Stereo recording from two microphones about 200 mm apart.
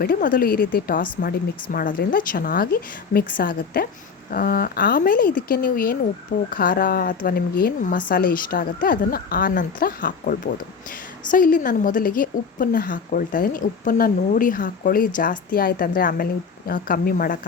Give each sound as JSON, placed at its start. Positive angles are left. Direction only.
{"t": 0.0, "sound": "a woman's voice", "side_deg": 45}
{"t": 4.9, "sound": "a woman's voice", "side_deg": 45}